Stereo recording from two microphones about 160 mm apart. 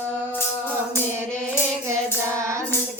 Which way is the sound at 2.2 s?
20° right (ahead or behind).